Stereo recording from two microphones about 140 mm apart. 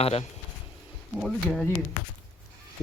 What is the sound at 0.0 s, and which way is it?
Speech, 45° left (ahead or behind).